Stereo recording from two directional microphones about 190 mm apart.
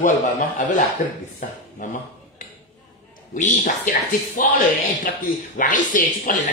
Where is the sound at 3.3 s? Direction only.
45° left (ahead or behind).